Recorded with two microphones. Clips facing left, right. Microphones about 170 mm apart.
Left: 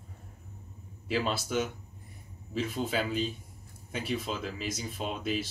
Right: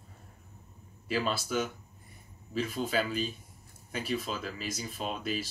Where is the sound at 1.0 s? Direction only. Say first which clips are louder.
Left 1 dB; 20° left (ahead or behind).